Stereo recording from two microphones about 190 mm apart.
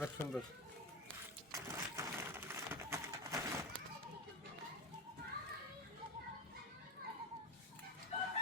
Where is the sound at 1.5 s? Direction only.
15° right (ahead or behind).